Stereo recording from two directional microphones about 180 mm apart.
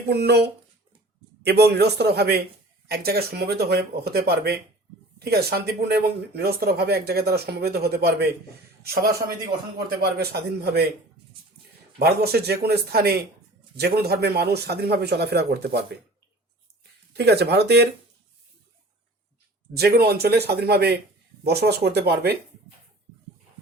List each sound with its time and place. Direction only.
0.1 s a man's voice: 65° right (ahead or behind)
11.9 s speech: 60° right (ahead or behind)
17.2 s speech: 65° right (ahead or behind)
19.7 s speech: 60° right (ahead or behind)